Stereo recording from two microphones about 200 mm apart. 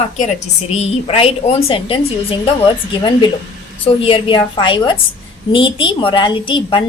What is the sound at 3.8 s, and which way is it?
A woman's voice, 25° left (ahead or behind).